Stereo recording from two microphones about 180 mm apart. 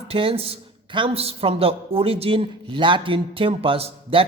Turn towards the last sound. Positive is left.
turn(degrees=-30)  # may be behind; listen again after turning